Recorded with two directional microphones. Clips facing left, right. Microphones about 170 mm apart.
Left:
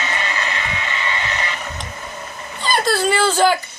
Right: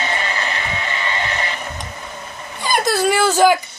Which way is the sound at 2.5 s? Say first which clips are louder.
Right 1 dB; 10° right (ahead or behind).